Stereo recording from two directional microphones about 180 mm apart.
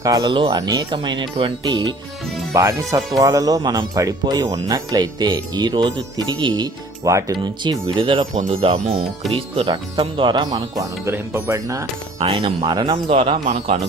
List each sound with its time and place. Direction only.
0.0 s speech: 20° right (ahead or behind)
8.3 s speech: 40° right (ahead or behind); by 11.9 s 15° right (ahead or behind)
12.2 s speech: 30° right (ahead or behind)